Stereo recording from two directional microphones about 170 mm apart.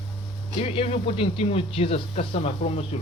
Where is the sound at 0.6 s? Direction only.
35° left (ahead or behind).